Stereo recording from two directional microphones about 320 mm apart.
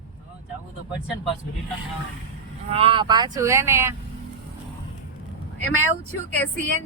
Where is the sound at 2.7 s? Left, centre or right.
Centre.